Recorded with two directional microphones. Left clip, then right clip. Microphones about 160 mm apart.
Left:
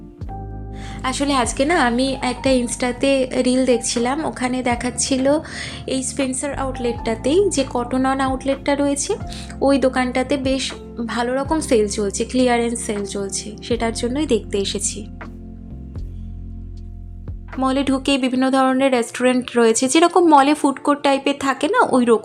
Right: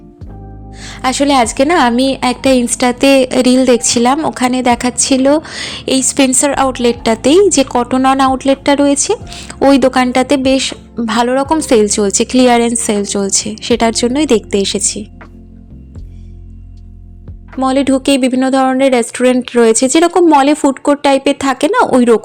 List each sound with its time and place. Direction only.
0.8 s a woman's voice: 55° right (ahead or behind); by 15.0 s 40° right (ahead or behind)
17.6 s speech: 35° right (ahead or behind)